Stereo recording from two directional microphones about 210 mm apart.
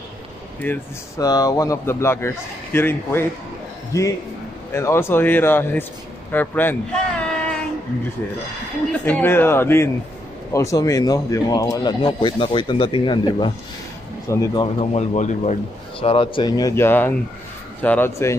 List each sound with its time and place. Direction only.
0.6 s a man's voice: 10° left (ahead or behind)
9.0 s speech: 10° left (ahead or behind)